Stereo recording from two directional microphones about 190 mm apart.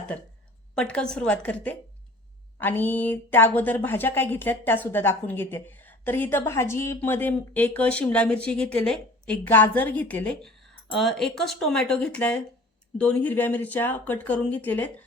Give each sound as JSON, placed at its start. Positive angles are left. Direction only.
{"t": 0.8, "sound": "a woman's voice", "side_deg": 5}